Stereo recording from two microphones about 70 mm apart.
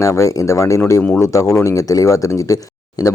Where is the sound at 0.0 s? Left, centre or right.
Left.